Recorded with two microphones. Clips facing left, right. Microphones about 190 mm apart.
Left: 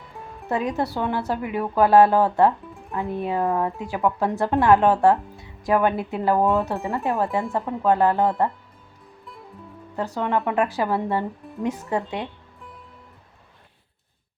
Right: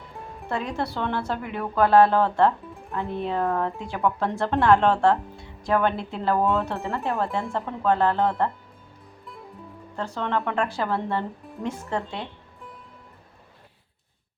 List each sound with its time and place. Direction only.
0.4 s a woman's voice: 15° left (ahead or behind)
10.2 s a woman's voice: 10° left (ahead or behind)